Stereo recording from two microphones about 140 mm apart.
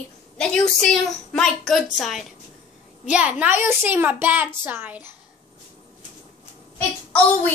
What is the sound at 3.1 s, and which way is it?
A child's voice, 10° right (ahead or behind).